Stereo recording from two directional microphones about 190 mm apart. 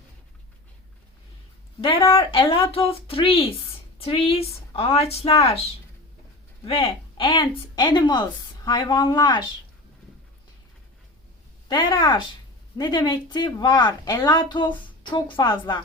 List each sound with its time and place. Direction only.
2.0 s speech: 30° left (ahead or behind)
6.7 s speech: 30° left (ahead or behind)
11.7 s speech: 25° left (ahead or behind)